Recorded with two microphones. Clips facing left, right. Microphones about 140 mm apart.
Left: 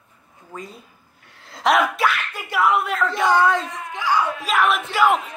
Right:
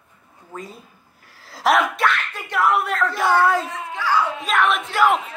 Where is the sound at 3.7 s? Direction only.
15° left (ahead or behind).